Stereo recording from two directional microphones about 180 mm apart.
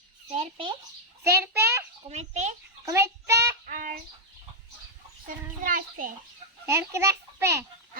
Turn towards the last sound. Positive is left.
turn(degrees=-15)  # may be behind; listen again after turning